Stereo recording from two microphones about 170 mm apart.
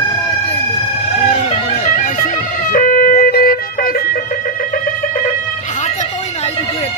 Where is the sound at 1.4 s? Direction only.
45° left (ahead or behind).